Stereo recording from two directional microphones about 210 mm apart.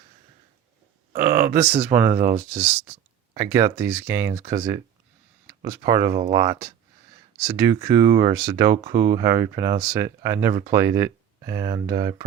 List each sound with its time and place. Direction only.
1.1 s speech: 10° right (ahead or behind)
5.8 s speech: 15° right (ahead or behind)